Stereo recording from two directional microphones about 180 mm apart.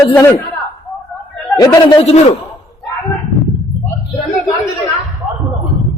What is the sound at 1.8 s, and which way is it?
Speech, 35° left (ahead or behind).